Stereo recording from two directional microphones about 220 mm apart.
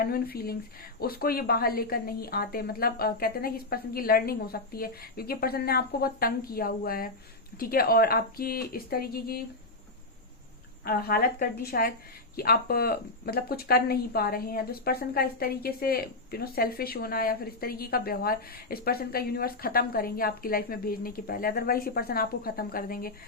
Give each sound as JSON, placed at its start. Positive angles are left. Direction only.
{"t": 0.0, "sound": "speech", "side_deg": 45}
{"t": 10.8, "sound": "speech", "side_deg": 45}